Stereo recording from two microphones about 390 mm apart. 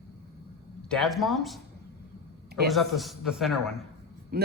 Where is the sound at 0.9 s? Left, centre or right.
Centre.